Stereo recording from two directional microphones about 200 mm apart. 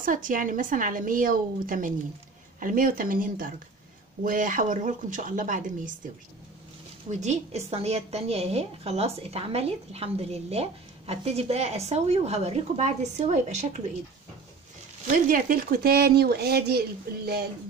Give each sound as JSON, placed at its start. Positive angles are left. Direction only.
{"t": 0.0, "sound": "a woman's voice", "side_deg": -45}
{"t": 7.1, "sound": "a woman's voice", "side_deg": -35}
{"t": 15.0, "sound": "a woman's voice", "side_deg": -45}